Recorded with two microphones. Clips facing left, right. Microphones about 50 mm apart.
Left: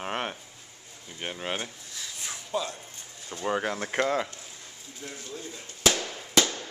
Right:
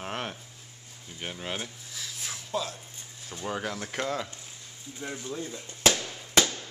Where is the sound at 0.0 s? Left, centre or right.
Centre.